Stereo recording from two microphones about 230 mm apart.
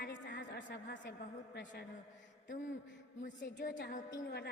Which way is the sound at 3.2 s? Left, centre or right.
Left.